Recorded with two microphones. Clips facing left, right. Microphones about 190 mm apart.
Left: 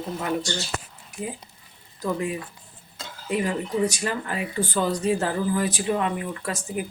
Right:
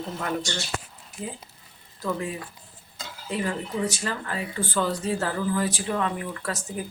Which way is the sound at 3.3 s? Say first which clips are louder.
Left 3 dB; 15° left (ahead or behind).